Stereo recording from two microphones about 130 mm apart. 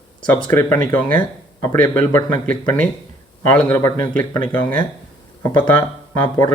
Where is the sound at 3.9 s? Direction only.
15° left (ahead or behind).